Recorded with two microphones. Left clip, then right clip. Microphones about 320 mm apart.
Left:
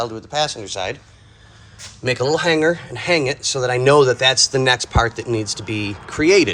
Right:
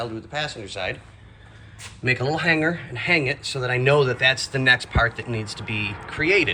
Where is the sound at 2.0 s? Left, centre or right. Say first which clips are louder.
Left 4 dB; centre.